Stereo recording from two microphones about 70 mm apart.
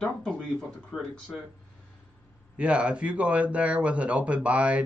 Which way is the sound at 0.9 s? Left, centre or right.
Centre.